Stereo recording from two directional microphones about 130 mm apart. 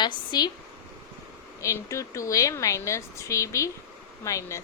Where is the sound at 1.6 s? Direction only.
25° left (ahead or behind).